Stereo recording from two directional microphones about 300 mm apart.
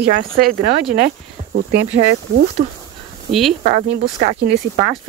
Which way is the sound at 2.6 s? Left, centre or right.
Right.